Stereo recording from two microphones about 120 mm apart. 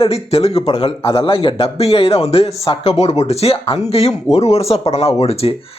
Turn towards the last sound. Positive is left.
turn(degrees=55)  # may be behind; listen again after turning